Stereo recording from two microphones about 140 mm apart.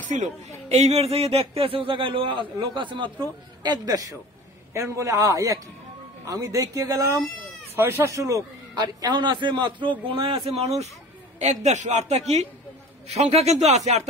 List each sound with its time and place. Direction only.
0.7 s a man's voice: 50° right (ahead or behind)